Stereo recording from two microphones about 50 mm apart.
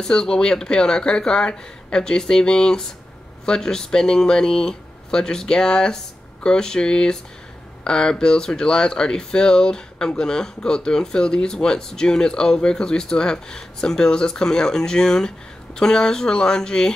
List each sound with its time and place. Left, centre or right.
0.0 s speech: centre